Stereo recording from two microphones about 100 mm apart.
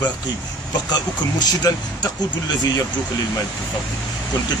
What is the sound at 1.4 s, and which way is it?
Speech, 45° left (ahead or behind).